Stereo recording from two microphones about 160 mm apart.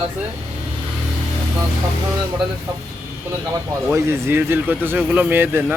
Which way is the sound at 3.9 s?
15° right (ahead or behind).